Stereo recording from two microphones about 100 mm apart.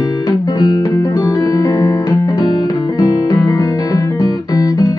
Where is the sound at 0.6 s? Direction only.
35° left (ahead or behind).